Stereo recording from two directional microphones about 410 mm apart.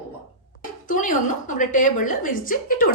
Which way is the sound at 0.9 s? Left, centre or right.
Centre.